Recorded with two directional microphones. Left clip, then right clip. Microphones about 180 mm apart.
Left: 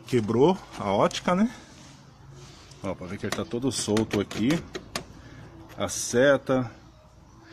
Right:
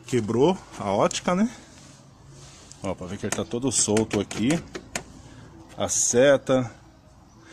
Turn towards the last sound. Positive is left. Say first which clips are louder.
# right 3 dB
turn(degrees=-25)  # may be behind; listen again after turning